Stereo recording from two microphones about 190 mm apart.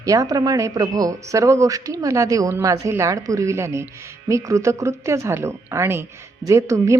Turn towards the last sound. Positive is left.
turn(degrees=-15)  # may be behind; listen again after turning